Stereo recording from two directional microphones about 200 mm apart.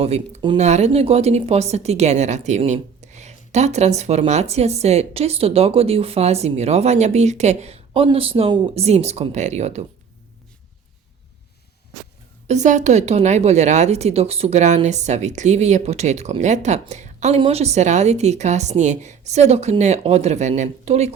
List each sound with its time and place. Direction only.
0.0 s speech: 30° right (ahead or behind)
12.5 s speech: 35° right (ahead or behind)